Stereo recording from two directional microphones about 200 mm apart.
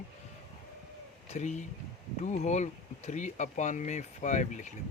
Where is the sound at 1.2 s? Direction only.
35° left (ahead or behind).